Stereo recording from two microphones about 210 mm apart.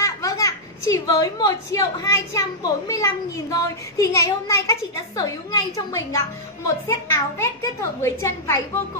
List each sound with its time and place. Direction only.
0.0 s a child's voice: 15° left (ahead or behind)